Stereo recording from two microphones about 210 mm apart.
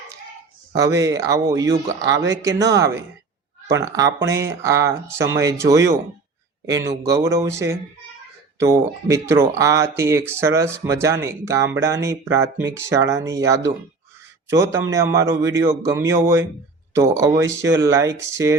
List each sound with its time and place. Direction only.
0.7 s speech: 15° right (ahead or behind)